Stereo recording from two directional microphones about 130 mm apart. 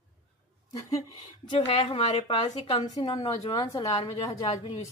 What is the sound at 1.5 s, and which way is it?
A woman's voice, 45° left (ahead or behind).